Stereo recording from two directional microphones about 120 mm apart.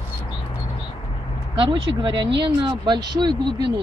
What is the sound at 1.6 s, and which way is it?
Speech, 40° right (ahead or behind).